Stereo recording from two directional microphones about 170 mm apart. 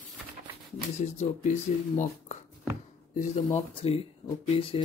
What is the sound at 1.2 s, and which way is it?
Speech, 45° left (ahead or behind).